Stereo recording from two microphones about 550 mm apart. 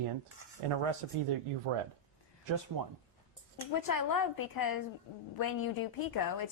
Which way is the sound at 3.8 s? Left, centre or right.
Left.